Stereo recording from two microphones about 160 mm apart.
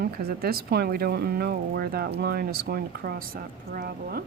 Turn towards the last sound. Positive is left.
turn(degrees=-70)  # may be behind; listen again after turning